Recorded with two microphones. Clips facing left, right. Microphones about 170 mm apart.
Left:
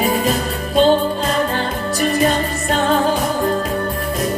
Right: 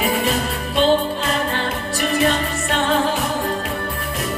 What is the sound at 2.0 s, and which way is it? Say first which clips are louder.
Music: left 2 dB; 40° left (ahead or behind).